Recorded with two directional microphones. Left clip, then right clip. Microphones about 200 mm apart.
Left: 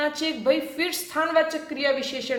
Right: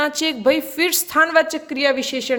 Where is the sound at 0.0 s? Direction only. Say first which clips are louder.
Right 6 dB; 45° right (ahead or behind).